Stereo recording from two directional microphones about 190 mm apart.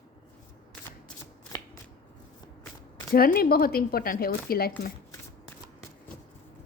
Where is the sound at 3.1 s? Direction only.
50° left (ahead or behind).